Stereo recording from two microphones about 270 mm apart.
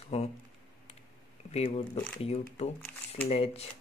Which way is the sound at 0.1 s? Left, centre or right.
Left.